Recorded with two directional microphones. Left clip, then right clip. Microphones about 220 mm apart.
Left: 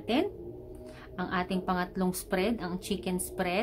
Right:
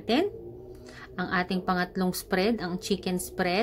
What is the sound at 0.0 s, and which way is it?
A woman's voice, 20° right (ahead or behind).